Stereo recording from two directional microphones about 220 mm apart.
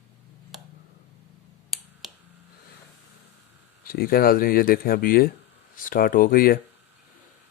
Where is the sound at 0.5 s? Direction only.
Centre (ahead or behind).